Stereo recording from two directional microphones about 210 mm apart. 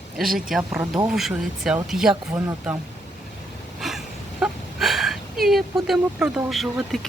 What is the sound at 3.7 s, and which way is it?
Speech, centre (ahead or behind).